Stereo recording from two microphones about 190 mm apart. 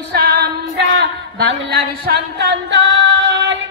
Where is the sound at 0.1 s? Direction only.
55° right (ahead or behind).